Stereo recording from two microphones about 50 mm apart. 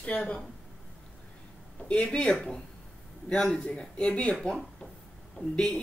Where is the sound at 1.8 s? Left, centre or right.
Left.